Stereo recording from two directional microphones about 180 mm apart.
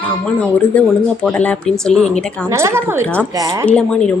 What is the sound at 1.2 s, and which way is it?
Speech, 5° left (ahead or behind).